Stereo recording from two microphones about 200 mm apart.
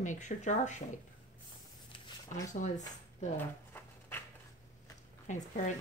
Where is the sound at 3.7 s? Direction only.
10° left (ahead or behind).